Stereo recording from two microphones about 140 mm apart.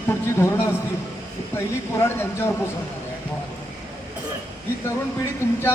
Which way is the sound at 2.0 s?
20° left (ahead or behind).